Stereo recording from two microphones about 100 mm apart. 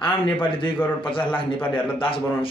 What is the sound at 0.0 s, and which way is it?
Speech, 55° left (ahead or behind).